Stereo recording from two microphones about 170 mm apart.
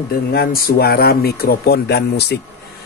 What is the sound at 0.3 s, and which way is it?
A man's voice, 65° left (ahead or behind).